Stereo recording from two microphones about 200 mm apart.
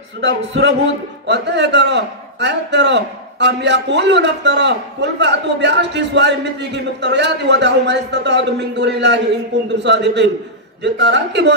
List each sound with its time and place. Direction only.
0.2 s a man's voice: 70° right (ahead or behind)
1.2 s a man's voice: 60° right (ahead or behind)